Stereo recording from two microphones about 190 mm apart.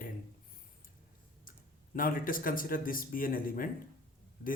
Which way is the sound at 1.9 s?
45° left (ahead or behind).